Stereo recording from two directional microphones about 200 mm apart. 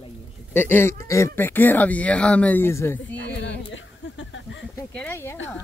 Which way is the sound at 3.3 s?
60° left (ahead or behind).